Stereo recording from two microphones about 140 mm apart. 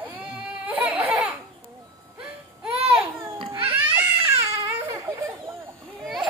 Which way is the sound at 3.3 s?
40° right (ahead or behind).